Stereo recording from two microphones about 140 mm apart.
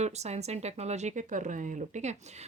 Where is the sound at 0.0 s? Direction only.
50° right (ahead or behind).